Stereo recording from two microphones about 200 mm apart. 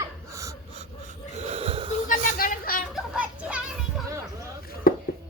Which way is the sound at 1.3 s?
30° right (ahead or behind).